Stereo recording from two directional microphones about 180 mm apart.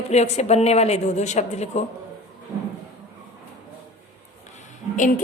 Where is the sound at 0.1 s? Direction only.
35° left (ahead or behind).